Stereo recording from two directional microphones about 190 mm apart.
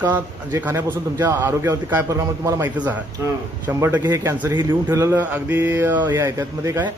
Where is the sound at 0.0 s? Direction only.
10° right (ahead or behind).